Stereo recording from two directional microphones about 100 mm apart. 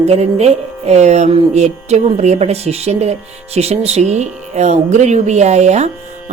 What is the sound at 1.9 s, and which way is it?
Speech, 90° right.